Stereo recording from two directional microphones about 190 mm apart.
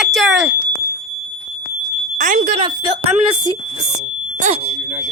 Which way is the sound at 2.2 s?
45° right (ahead or behind).